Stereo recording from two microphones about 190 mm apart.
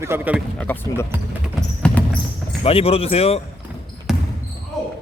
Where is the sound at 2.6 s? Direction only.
30° left (ahead or behind).